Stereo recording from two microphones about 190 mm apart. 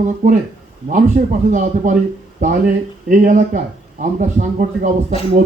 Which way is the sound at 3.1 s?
45° right (ahead or behind).